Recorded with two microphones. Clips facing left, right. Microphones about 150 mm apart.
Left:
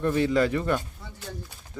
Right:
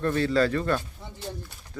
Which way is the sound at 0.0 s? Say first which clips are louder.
Left 1 dB; 15° left (ahead or behind).